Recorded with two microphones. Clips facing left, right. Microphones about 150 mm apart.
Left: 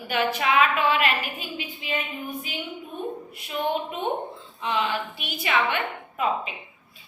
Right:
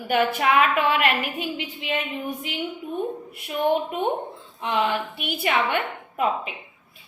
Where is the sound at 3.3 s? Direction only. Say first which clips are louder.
Right 5 dB; 55° right (ahead or behind).